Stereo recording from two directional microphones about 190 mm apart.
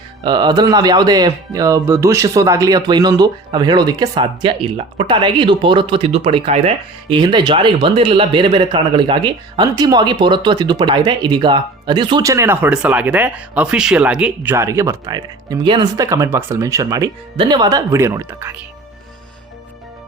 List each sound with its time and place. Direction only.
0.2 s speech: 25° right (ahead or behind)